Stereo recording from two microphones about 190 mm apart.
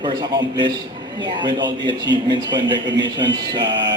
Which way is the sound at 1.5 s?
25° right (ahead or behind).